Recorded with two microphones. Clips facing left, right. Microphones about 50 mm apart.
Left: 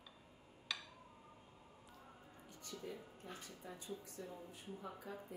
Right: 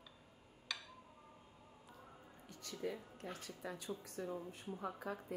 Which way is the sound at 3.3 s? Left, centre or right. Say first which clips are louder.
Right 5 dB; right.